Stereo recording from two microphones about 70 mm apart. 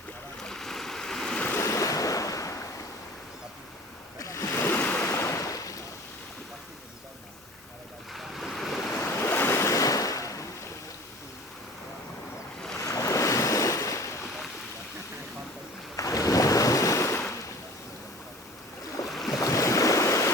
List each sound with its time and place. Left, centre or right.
0.4 s stream: centre
1.6 s waves: left
4.2 s a sound: left
4.6 s waves: left
5.0 s waves: left
8.1 s waves: centre
9.0 s waves: left
12.8 s waves: left
16.0 s ocean: left
19.0 s waves: centre
19.3 s waves: left